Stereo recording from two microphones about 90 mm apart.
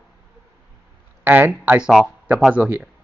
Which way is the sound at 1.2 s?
20° right (ahead or behind).